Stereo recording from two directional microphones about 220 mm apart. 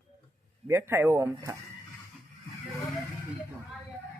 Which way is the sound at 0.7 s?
10° right (ahead or behind).